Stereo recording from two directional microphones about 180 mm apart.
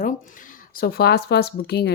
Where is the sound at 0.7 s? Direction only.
60° left (ahead or behind).